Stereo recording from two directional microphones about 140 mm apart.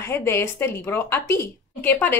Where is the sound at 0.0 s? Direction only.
15° left (ahead or behind).